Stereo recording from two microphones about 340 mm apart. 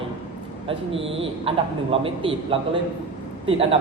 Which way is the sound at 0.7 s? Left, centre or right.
Centre.